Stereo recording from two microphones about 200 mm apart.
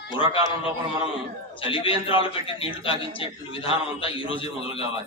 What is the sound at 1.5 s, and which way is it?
A man's voice, 25° left (ahead or behind).